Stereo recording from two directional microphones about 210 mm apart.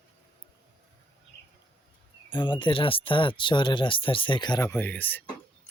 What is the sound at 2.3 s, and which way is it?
Speech, 20° left (ahead or behind).